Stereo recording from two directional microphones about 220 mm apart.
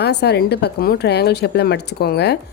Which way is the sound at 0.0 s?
50° left (ahead or behind).